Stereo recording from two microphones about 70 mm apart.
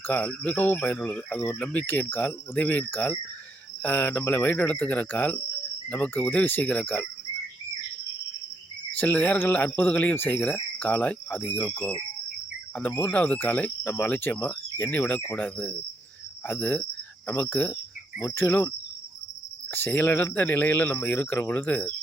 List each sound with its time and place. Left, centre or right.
0.1 s speech: left
1.9 s speech: left
9.1 s speech: left
13.1 s speech: left
18.3 s cricket: left
19.7 s speech: left